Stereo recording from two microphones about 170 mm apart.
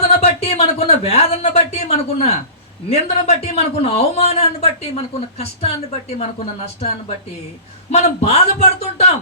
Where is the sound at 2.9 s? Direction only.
40° left (ahead or behind).